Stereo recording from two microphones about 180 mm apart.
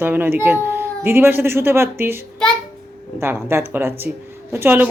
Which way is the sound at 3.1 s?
15° right (ahead or behind).